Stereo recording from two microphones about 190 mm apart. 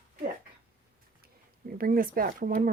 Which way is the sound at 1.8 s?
50° right (ahead or behind).